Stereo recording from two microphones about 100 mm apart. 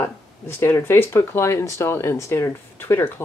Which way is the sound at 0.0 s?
25° left (ahead or behind).